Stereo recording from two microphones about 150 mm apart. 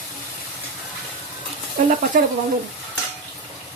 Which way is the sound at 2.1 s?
65° right (ahead or behind).